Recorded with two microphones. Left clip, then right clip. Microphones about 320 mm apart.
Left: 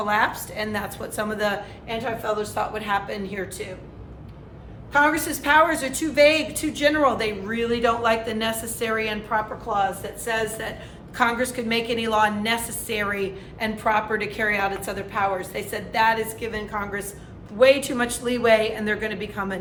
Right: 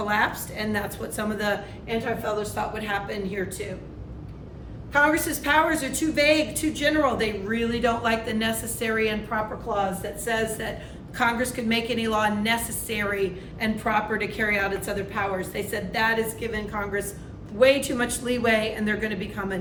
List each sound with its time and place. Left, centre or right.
0.0 s a woman's voice: centre
4.9 s a woman's voice: centre